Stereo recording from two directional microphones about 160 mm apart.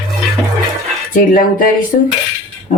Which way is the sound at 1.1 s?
55° left (ahead or behind).